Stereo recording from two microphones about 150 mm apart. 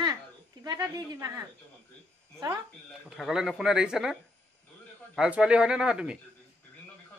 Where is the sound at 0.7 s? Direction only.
25° right (ahead or behind).